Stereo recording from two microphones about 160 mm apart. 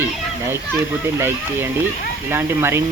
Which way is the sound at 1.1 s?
15° right (ahead or behind).